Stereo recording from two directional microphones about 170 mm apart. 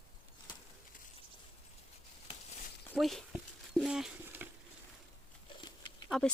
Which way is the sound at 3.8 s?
5° right (ahead or behind).